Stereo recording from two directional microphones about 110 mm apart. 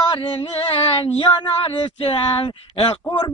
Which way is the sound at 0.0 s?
45° left (ahead or behind).